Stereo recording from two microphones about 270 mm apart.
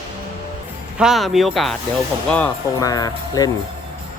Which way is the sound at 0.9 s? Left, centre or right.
Centre.